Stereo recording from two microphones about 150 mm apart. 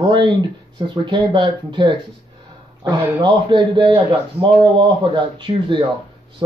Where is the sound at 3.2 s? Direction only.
35° right (ahead or behind).